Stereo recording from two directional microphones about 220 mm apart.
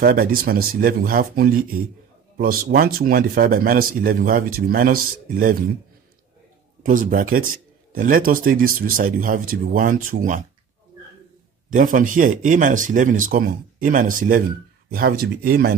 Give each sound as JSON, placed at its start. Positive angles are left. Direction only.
{"t": 0.0, "sound": "speech", "side_deg": -40}
{"t": 6.8, "sound": "speech", "side_deg": -35}
{"t": 11.7, "sound": "speech", "side_deg": -35}